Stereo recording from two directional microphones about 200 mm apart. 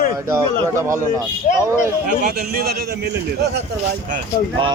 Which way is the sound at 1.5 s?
35° left (ahead or behind).